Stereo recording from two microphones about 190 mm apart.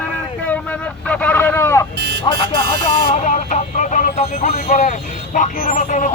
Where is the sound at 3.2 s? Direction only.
40° left (ahead or behind).